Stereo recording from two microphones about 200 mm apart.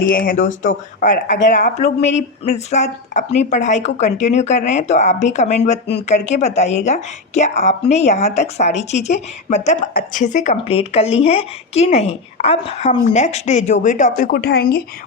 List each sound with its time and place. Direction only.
0.1 s speech: 45° left (ahead or behind)